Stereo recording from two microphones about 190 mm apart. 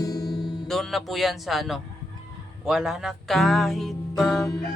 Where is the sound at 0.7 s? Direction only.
Centre (ahead or behind).